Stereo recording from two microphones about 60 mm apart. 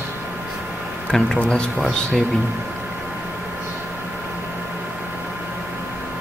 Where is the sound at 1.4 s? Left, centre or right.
Centre.